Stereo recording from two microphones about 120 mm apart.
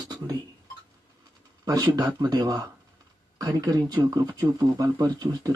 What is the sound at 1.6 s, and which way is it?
Speech, 35° right (ahead or behind).